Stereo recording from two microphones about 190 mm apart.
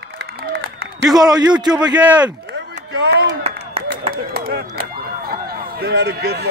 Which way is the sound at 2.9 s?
60° right (ahead or behind).